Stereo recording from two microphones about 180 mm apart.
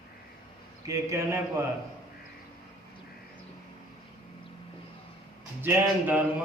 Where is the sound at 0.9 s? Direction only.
15° right (ahead or behind).